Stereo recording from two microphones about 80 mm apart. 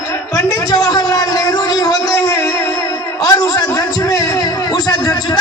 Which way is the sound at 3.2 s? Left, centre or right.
Left.